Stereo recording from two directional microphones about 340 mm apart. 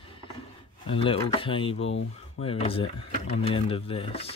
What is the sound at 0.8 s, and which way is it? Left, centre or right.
Speech, centre.